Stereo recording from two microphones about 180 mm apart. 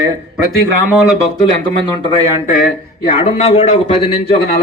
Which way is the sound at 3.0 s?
30° left (ahead or behind).